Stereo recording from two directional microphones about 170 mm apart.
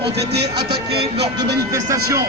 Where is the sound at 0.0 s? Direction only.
75° right (ahead or behind).